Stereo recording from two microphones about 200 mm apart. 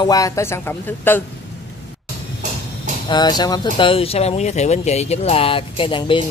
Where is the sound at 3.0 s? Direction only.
20° left (ahead or behind).